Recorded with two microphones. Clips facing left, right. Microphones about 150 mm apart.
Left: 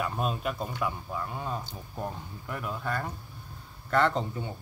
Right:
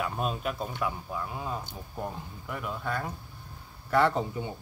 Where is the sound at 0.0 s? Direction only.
Centre (ahead or behind).